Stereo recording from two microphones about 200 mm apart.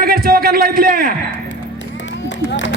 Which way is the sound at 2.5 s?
60° left (ahead or behind).